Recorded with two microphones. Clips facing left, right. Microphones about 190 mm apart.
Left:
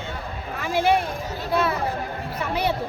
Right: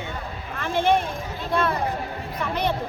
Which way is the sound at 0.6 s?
10° left (ahead or behind).